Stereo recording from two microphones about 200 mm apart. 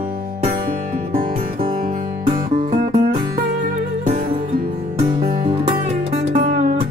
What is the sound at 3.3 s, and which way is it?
Music, 55° right (ahead or behind).